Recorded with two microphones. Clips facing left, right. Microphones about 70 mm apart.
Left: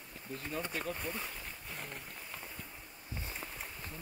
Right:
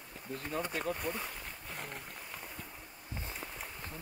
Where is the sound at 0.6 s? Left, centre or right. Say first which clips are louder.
Right 3 dB; right.